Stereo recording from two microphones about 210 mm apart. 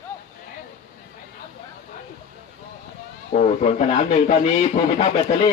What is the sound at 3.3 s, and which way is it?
Speech, 35° left (ahead or behind).